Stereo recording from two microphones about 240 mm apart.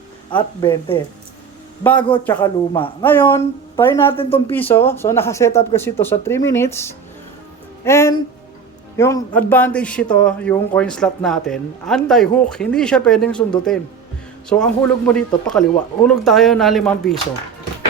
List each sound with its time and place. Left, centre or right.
0.3 s speech: centre
1.8 s speech: centre
4.1 s speech: left
4.5 s speech: centre
7.9 s a man's voice: centre